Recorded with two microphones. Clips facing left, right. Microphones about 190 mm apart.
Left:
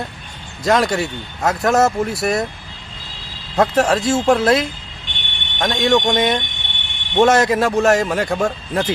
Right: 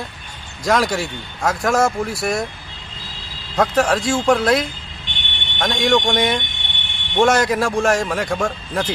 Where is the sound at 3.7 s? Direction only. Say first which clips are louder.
Left 1 dB; 25° left (ahead or behind).